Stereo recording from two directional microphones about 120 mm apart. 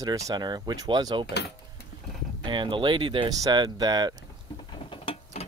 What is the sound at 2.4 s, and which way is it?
Speech, 40° right (ahead or behind).